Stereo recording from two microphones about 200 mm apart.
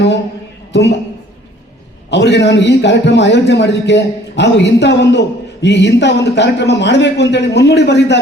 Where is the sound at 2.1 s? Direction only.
60° left (ahead or behind).